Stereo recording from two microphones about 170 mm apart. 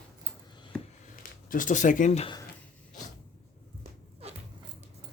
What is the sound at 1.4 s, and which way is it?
Speech, 50° left (ahead or behind).